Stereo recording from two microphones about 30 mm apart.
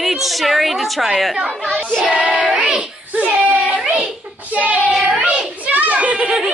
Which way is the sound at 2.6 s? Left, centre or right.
Right.